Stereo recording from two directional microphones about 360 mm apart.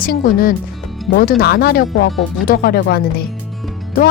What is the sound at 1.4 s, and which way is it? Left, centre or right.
Speech, left.